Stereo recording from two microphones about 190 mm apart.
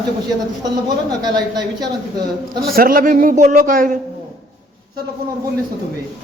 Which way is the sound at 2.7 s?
50° right (ahead or behind).